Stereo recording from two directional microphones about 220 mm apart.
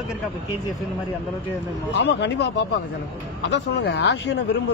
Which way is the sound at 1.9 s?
50° left (ahead or behind).